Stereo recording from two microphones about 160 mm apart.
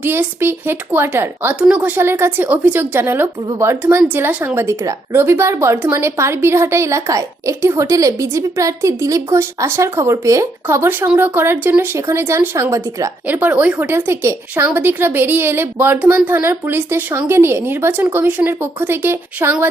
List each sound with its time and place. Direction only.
0.0 s speech: 15° right (ahead or behind)